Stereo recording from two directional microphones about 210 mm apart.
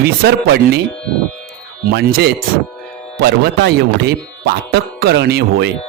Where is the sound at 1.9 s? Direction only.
50° right (ahead or behind).